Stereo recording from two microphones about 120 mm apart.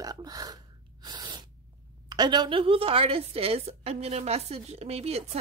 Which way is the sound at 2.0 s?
35° right (ahead or behind).